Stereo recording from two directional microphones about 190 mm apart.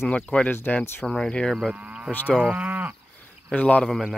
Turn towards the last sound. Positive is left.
turn(degrees=0)  # may be behind; listen again after turning